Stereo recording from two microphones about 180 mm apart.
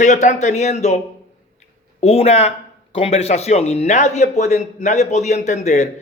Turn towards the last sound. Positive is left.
turn(degrees=40)  # may be behind; listen again after turning